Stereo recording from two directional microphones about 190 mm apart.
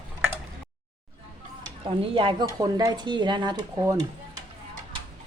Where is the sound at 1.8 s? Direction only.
30° right (ahead or behind).